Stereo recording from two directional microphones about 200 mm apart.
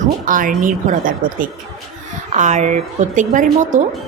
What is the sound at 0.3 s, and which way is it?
A woman's voice, 40° right (ahead or behind).